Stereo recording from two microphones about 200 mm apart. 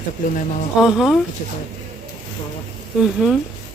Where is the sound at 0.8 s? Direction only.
Centre (ahead or behind).